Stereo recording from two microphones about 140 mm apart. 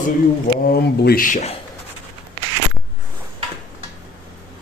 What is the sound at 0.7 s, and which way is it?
Speech, 85° left.